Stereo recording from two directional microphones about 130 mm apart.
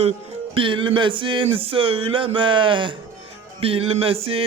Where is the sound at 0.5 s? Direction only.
40° right (ahead or behind).